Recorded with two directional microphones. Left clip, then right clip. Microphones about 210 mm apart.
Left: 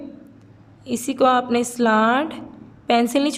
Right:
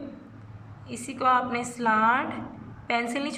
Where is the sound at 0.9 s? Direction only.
65° left (ahead or behind).